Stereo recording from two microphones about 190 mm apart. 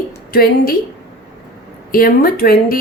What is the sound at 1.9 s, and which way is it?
Speech, 50° left (ahead or behind).